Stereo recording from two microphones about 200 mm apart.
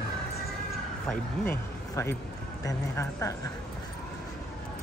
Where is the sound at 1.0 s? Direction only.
10° left (ahead or behind).